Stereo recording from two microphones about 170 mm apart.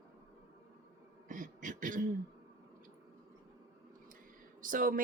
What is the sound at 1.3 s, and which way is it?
Speech, 50° right (ahead or behind).